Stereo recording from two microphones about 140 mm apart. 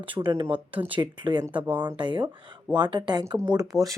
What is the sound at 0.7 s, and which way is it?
Speech, 10° right (ahead or behind).